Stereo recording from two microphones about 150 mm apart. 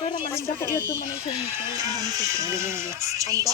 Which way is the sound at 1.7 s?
25° right (ahead or behind).